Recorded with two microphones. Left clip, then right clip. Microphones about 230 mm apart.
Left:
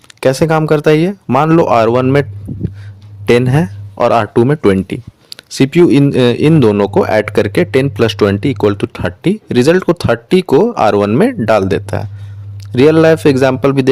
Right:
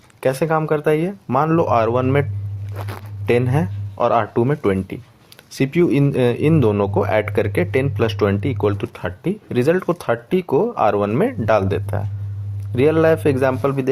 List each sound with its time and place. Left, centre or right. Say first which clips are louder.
0.2 s speech: left 7 dB; left
3.2 s speech: left 7 dB; left